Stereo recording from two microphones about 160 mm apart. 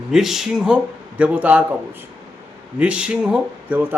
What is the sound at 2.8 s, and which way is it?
A man's voice, 5° right (ahead or behind).